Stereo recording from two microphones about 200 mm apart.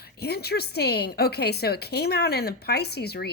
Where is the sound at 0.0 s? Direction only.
50° left (ahead or behind).